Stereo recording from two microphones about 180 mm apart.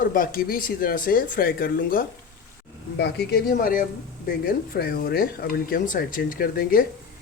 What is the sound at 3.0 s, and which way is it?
Speech, 65° left (ahead or behind).